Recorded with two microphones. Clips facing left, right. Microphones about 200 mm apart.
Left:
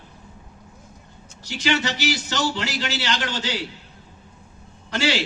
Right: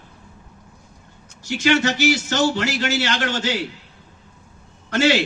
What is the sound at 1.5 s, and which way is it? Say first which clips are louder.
A man's voice: right 5 dB; 50° right (ahead or behind).